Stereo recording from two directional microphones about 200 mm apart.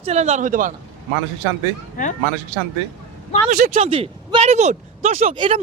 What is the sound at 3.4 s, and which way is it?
Speech, 45° right (ahead or behind).